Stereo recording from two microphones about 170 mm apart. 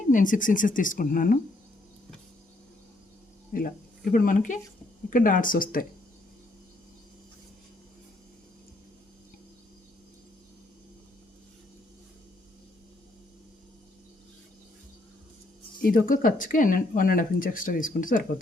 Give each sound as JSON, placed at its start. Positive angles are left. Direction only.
{"t": 0.1, "sound": "speech", "side_deg": 50}
{"t": 3.5, "sound": "speech", "side_deg": 55}
{"t": 15.8, "sound": "speech", "side_deg": 55}